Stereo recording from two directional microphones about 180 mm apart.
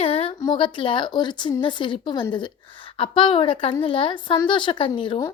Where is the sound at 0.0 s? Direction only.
30° left (ahead or behind).